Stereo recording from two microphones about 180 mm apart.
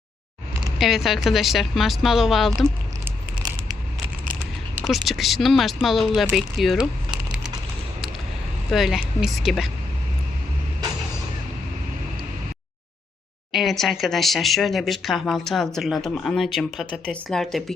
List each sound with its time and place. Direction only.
0.8 s speech: centre (ahead or behind)
5.0 s speech: centre (ahead or behind)
8.7 s speech: centre (ahead or behind)
13.5 s speech: centre (ahead or behind)